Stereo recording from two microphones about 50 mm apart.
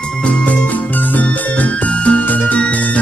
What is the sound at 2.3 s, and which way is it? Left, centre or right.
Music, left.